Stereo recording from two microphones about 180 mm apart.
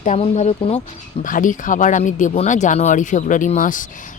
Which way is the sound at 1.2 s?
45° left (ahead or behind).